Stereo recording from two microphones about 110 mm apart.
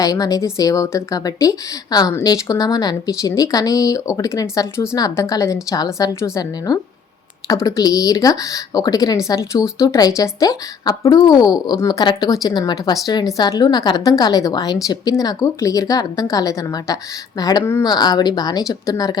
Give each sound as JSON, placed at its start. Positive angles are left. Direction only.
{"t": 0.0, "sound": "a woman's voice", "side_deg": 35}